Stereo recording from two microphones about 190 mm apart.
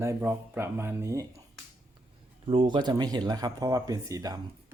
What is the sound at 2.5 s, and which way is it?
Speech, 25° right (ahead or behind).